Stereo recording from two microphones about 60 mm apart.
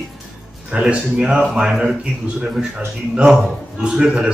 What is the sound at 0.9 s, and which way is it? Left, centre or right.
Speech, centre.